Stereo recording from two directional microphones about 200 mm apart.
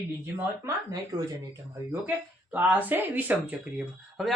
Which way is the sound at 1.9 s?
10° right (ahead or behind).